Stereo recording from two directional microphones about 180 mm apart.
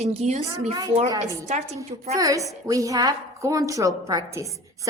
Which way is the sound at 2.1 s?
20° right (ahead or behind).